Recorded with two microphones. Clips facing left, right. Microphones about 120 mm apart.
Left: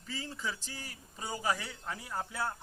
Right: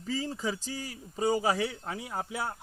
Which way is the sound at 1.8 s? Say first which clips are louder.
Right 3 dB; 20° right (ahead or behind).